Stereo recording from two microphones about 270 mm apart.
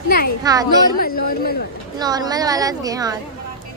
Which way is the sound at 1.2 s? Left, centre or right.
Left.